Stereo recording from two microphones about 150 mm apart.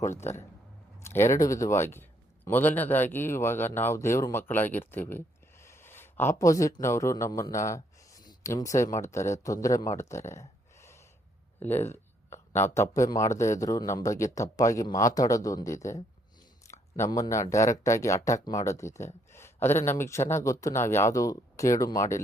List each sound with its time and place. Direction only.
0.0 s a man's voice: 15° left (ahead or behind)